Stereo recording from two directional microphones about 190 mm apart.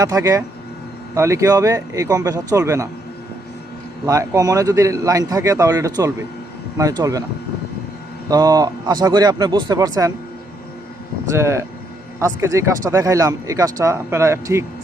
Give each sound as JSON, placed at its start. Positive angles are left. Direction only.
{"t": 0.0, "sound": "speech", "side_deg": -15}
{"t": 4.0, "sound": "speech", "side_deg": -15}
{"t": 8.3, "sound": "speech", "side_deg": -20}
{"t": 11.3, "sound": "speech", "side_deg": -15}